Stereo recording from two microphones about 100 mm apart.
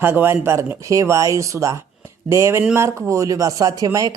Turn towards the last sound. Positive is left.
turn(degrees=-35)  # may be behind; listen again after turning